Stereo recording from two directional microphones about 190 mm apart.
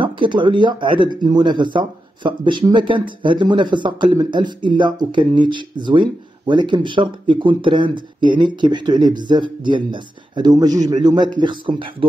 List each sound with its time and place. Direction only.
0.0 s speech: 25° right (ahead or behind)